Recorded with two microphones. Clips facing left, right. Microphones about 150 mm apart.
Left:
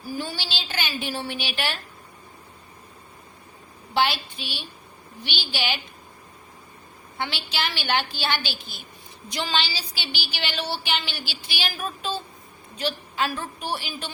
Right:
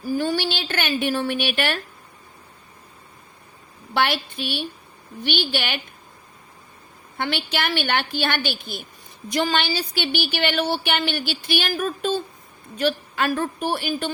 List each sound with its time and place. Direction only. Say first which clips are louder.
0.0 s a woman's voice: right 9 dB; 50° right (ahead or behind)
3.9 s a woman's voice: right 1 dB; 55° right (ahead or behind)
7.2 s a woman's voice: right 4 dB; 55° right (ahead or behind)